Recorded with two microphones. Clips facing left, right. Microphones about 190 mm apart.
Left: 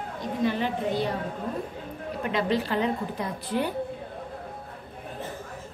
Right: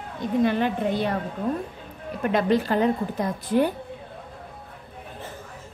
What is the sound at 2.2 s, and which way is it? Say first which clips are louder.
A woman's voice: right 5 dB; 50° right (ahead or behind).